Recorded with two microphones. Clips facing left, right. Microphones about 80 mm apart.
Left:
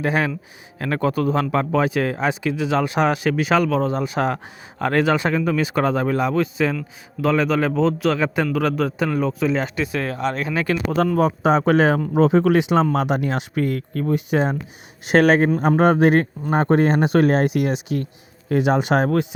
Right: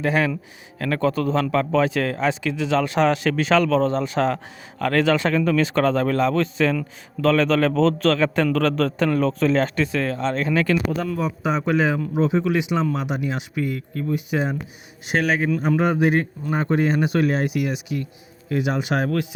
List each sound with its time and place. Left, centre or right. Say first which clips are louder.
0.0 s a man's voice: even; left
10.9 s speech: left 6 dB; left
15.0 s speech: left 7 dB; left
15.4 s speech: left 4 dB; left